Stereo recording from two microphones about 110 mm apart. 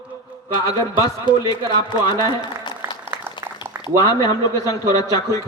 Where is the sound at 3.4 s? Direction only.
25° right (ahead or behind).